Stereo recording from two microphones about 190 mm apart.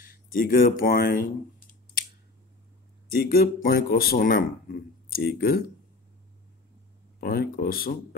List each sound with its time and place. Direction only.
0.0 s speech: 45° left (ahead or behind)
3.1 s speech: 50° left (ahead or behind)
7.2 s speech: 50° left (ahead or behind)